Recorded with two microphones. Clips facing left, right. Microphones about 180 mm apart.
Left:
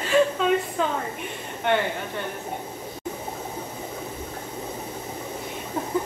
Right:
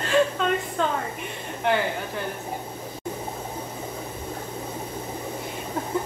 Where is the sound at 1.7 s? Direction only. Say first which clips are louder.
Even; centre (ahead or behind).